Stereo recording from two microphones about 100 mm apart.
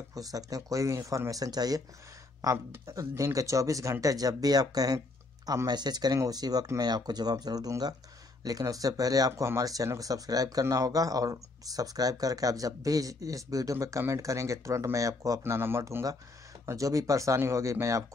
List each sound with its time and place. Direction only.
0.1 s speech: 35° right (ahead or behind)